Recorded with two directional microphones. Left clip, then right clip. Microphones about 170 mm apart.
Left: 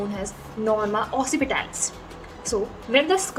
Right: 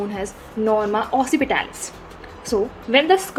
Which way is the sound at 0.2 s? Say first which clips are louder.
Right 5 dB; 40° right (ahead or behind).